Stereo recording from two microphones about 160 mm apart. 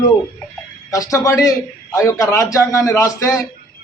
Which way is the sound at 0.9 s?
20° left (ahead or behind).